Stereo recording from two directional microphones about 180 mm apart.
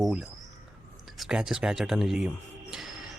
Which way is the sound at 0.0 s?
Centre (ahead or behind).